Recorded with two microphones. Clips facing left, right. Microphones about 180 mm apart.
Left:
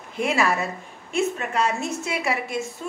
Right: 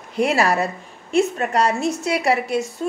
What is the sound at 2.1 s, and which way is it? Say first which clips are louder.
Speech: right 7 dB; 70° right (ahead or behind).